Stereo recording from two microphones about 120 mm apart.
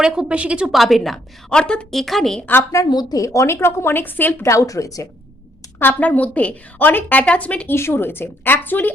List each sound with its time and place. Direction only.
0.0 s a woman's voice: 5° right (ahead or behind)
2.5 s a woman's voice: 20° left (ahead or behind)
2.9 s a woman's voice: 35° left (ahead or behind)
5.8 s a woman's voice: 10° left (ahead or behind)